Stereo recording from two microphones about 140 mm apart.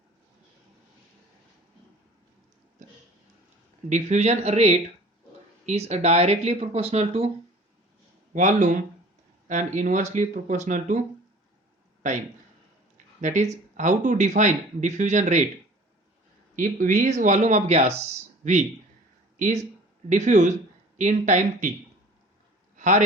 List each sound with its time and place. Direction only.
3.8 s speech: 55° right (ahead or behind)
8.3 s speech: 65° right (ahead or behind)
13.2 s speech: 60° right (ahead or behind)
16.6 s speech: 70° right (ahead or behind)
22.8 s a man's voice: 65° right (ahead or behind)